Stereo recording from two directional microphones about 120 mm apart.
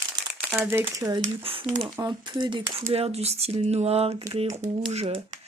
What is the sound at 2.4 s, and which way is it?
Speech, 40° right (ahead or behind).